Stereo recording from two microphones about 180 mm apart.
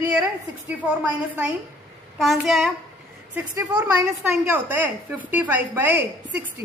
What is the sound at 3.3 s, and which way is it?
A woman's voice, 15° right (ahead or behind).